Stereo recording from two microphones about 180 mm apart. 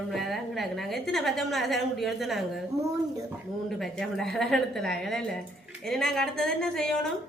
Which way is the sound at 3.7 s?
Centre (ahead or behind).